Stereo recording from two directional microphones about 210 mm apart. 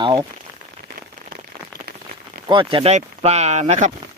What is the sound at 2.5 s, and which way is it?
Speech, 25° right (ahead or behind).